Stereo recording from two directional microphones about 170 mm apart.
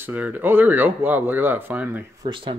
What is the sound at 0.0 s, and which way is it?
Speech, 10° right (ahead or behind).